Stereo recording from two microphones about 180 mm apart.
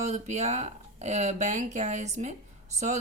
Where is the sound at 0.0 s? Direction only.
40° right (ahead or behind).